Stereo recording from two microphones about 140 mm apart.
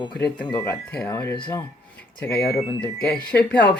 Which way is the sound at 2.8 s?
5° left (ahead or behind).